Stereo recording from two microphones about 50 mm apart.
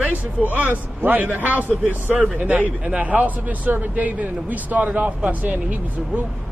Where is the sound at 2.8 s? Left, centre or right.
Right.